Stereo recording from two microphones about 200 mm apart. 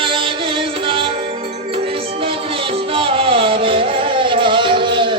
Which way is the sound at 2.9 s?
25° right (ahead or behind).